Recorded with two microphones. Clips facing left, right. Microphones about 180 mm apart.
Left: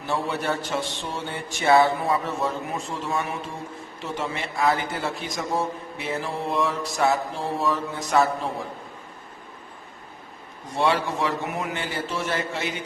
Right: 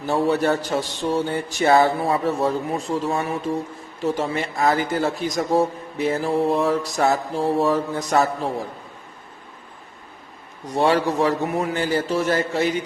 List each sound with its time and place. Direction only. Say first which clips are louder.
0.1 s a man's voice: right 7 dB; 40° right (ahead or behind)
10.8 s a man's voice: right 5 dB; 40° right (ahead or behind)